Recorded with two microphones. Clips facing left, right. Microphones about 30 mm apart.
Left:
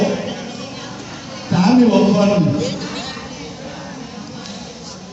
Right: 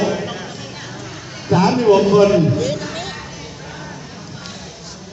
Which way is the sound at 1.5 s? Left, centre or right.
Left.